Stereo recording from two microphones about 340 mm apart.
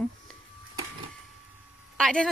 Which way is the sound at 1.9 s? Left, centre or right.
Centre.